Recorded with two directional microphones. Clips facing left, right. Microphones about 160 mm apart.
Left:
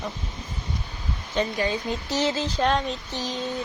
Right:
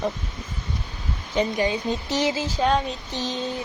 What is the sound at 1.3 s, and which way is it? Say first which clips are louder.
Speech: right 2 dB; 15° right (ahead or behind).